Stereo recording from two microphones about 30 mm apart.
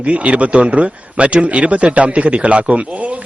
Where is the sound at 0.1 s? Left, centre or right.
Right.